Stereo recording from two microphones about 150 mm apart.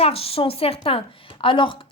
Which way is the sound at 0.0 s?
40° left (ahead or behind).